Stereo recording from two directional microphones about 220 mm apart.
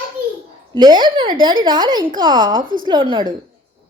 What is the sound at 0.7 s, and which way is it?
A child's voice, 20° right (ahead or behind).